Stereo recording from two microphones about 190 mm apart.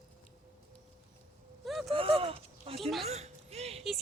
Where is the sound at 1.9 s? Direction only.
30° right (ahead or behind).